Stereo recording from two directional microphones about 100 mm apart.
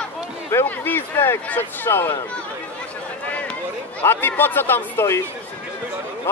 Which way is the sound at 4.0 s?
20° left (ahead or behind).